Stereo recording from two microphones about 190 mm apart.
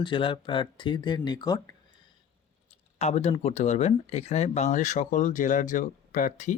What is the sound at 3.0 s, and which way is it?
Speech, 35° left (ahead or behind).